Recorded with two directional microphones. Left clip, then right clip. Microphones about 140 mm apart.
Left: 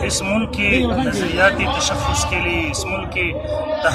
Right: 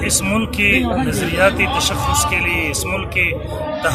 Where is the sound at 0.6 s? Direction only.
15° right (ahead or behind).